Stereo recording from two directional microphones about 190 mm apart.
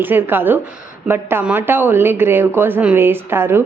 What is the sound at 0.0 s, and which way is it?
A woman's voice, 10° right (ahead or behind).